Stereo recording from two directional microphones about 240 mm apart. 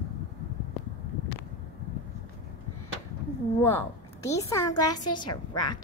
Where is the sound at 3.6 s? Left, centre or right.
Centre.